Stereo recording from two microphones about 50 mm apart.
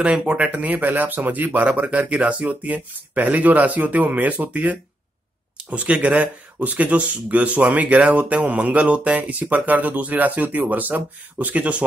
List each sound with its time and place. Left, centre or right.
0.0 s speech: right